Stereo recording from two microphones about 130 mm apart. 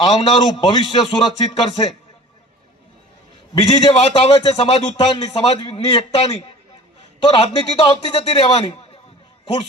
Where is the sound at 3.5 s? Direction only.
40° left (ahead or behind).